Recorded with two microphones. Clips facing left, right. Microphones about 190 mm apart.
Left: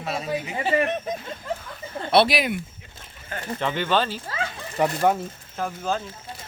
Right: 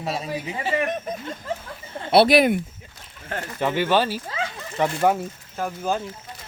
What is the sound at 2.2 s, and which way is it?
Speech, 50° right (ahead or behind).